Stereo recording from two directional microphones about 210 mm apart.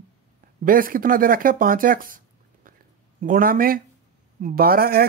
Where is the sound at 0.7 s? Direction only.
40° right (ahead or behind).